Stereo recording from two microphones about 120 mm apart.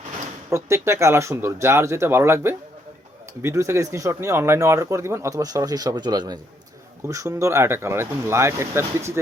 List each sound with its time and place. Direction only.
0.5 s speech: 25° right (ahead or behind)